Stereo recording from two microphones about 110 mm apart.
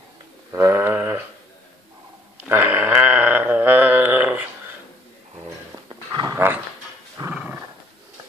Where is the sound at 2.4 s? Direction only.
15° right (ahead or behind).